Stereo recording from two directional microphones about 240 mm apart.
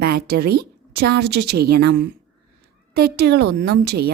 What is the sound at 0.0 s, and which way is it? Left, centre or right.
A woman's voice, right.